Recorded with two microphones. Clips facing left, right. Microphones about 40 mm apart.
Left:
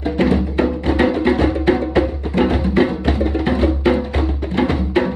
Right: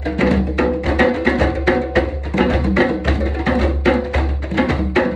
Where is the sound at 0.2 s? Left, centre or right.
Right.